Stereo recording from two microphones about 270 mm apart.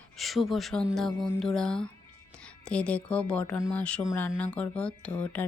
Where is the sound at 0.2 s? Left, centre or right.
Centre.